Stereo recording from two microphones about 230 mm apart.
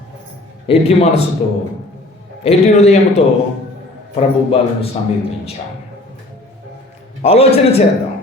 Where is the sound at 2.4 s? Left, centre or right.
Left.